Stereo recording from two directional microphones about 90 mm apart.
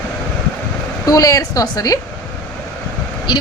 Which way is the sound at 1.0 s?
40° left (ahead or behind).